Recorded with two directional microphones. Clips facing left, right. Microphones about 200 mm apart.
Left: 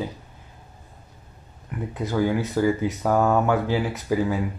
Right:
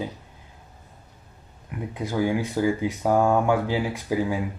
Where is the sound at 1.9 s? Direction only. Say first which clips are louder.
Left 1 dB; 15° right (ahead or behind).